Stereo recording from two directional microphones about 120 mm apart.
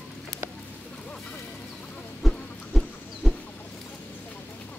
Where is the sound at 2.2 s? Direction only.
5° left (ahead or behind).